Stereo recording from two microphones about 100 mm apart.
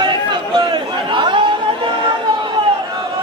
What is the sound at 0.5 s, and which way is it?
Chatter, 50° right (ahead or behind).